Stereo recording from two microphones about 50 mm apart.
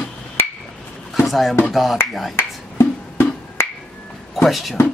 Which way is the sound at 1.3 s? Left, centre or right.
Centre.